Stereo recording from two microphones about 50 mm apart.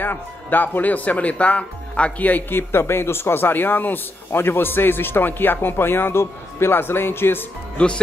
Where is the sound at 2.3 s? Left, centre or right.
Left.